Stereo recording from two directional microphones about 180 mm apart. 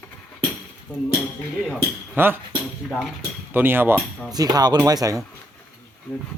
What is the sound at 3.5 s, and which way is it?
Speech, 10° right (ahead or behind).